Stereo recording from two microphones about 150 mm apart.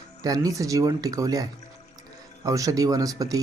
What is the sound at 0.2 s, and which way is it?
Speech, 25° right (ahead or behind).